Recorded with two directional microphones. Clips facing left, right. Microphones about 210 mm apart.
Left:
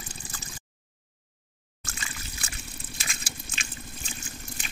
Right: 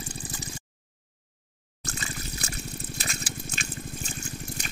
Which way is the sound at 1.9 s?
40° right (ahead or behind).